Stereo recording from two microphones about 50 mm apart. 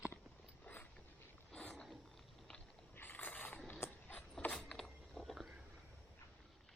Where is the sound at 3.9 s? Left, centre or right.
Left.